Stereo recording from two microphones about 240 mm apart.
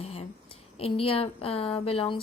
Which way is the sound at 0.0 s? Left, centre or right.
Left.